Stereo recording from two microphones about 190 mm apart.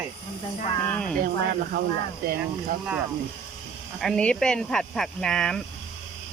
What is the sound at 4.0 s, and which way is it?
Speech, 5° left (ahead or behind).